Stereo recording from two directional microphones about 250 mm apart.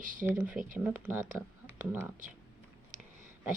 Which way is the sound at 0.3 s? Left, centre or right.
Centre.